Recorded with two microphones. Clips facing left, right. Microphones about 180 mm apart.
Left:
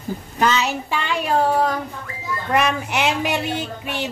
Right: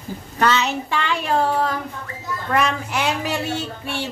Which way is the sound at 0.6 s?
10° left (ahead or behind).